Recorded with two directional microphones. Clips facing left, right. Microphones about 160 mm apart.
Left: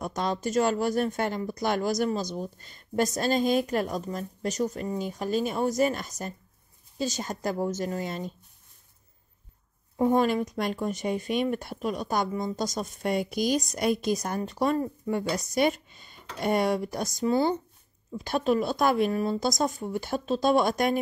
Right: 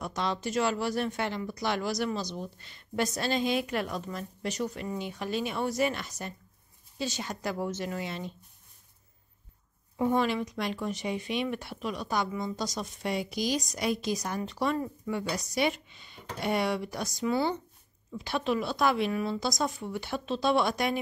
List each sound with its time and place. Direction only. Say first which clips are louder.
0.0 s a woman's voice: left 3 dB; 45° left (ahead or behind)
9.9 s speech: left 4 dB; 40° left (ahead or behind)